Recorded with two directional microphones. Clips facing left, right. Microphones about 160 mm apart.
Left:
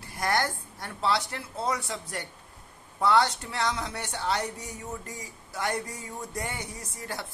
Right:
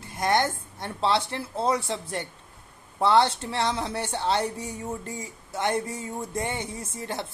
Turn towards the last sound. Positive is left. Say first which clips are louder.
# right 5 dB
turn(degrees=-25)  # may be behind; listen again after turning